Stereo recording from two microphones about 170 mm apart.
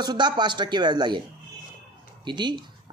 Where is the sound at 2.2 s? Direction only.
25° right (ahead or behind).